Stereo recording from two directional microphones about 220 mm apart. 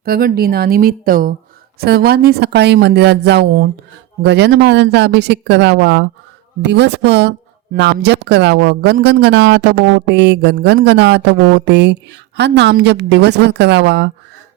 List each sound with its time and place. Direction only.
0.0 s a woman's voice: 40° right (ahead or behind)